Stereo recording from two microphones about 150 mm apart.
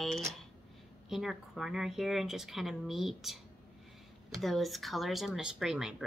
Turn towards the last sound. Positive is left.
turn(degrees=-5)  # may be behind; listen again after turning